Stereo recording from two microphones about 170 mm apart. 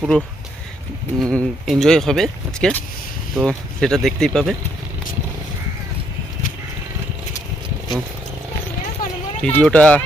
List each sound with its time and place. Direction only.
0.0 s speech: 5° right (ahead or behind)
1.2 s speech: 5° left (ahead or behind)
9.4 s speech: 5° left (ahead or behind)